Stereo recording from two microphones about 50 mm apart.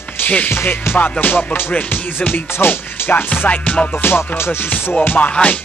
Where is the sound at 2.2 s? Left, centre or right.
Left.